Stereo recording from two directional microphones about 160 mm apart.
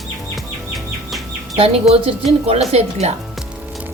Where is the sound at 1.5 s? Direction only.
35° right (ahead or behind).